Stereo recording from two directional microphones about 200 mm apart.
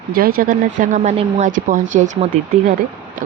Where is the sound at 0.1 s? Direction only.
50° right (ahead or behind).